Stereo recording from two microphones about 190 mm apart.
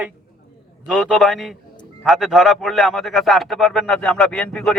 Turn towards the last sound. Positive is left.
turn(degrees=5)  # may be behind; listen again after turning